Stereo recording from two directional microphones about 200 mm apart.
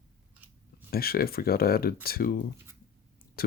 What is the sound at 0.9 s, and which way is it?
Speech, 50° left (ahead or behind).